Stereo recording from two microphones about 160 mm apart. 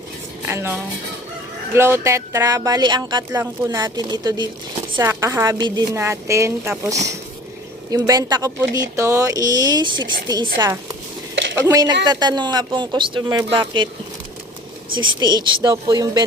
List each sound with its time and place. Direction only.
0.4 s a woman's voice: 15° right (ahead or behind)
3.3 s speech: 15° right (ahead or behind)
3.8 s a woman's voice: 25° right (ahead or behind)
14.9 s a woman's voice: 30° right (ahead or behind)